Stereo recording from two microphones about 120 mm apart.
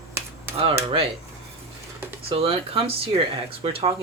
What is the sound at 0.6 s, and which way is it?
Speech, 55° right (ahead or behind).